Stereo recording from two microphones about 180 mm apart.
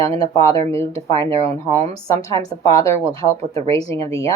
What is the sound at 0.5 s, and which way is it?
Speech, 30° right (ahead or behind).